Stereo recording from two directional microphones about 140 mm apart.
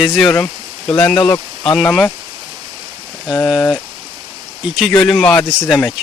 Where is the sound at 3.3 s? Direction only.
25° left (ahead or behind).